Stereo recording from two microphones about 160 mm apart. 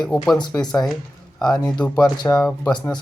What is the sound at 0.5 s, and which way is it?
Speech, 15° left (ahead or behind).